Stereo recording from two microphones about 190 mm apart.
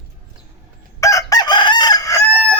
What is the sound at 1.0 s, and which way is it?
Chicken, 15° left (ahead or behind).